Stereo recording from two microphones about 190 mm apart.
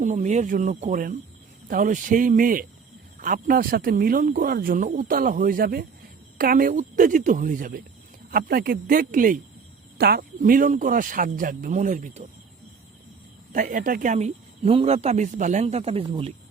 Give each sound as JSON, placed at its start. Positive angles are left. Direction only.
{"t": 0.0, "sound": "speech", "side_deg": -40}
{"t": 13.5, "sound": "speech", "side_deg": -45}